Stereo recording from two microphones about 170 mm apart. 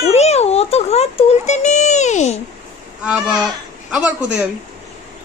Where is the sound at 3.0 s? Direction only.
5° right (ahead or behind).